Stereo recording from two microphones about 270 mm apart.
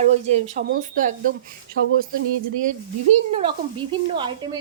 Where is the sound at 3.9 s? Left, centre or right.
Centre.